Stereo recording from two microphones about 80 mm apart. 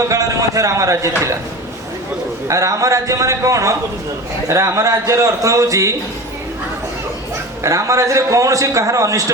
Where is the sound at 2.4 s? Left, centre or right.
Right.